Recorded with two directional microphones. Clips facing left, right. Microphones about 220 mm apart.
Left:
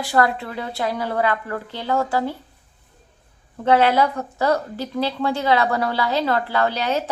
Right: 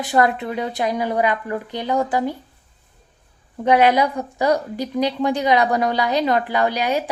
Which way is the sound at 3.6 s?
15° right (ahead or behind).